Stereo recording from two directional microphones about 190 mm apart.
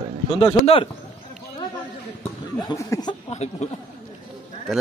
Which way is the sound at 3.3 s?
35° left (ahead or behind).